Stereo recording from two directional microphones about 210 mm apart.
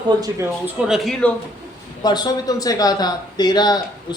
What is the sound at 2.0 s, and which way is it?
Speech, 20° left (ahead or behind).